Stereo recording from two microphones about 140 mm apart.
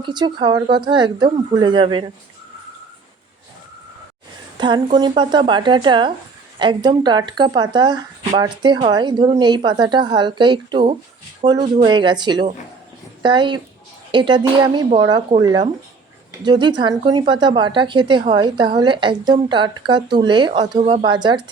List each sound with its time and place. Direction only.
0.0 s a woman's voice: 35° right (ahead or behind)
4.5 s a woman's voice: 35° right (ahead or behind)